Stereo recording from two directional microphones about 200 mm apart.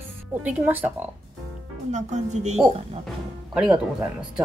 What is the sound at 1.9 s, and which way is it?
Speech, 35° right (ahead or behind).